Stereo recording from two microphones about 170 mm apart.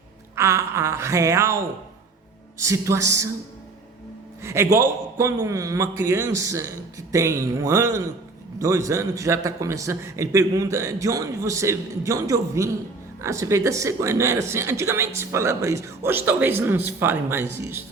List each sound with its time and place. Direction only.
0.3 s speech: 15° right (ahead or behind)
2.6 s speech: 15° right (ahead or behind)
4.4 s speech: 15° right (ahead or behind)